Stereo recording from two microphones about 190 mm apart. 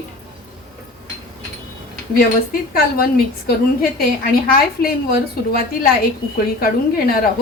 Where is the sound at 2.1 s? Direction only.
50° left (ahead or behind).